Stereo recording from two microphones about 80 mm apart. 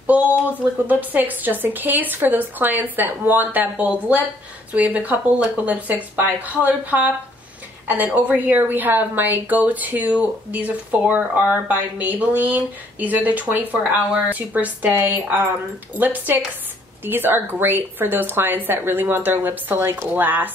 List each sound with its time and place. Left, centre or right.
0.0 s a sound: centre
0.8 s a woman's voice: right
6.1 s a woman's voice: centre